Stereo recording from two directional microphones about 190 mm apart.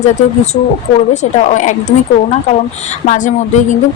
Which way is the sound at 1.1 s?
40° left (ahead or behind).